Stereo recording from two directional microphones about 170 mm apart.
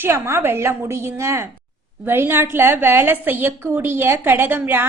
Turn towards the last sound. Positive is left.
turn(degrees=-10)  # may be behind; listen again after turning